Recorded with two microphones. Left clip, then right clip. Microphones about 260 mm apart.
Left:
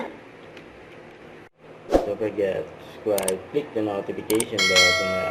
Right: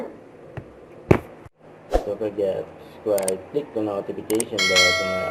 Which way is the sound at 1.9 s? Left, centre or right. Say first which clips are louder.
Left 3 dB; centre.